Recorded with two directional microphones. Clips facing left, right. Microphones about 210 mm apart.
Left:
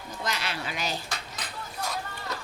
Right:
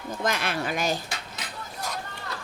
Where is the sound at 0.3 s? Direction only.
50° right (ahead or behind).